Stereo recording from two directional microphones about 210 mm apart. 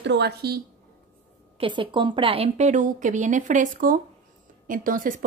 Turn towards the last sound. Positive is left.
turn(degrees=-40)  # may be behind; listen again after turning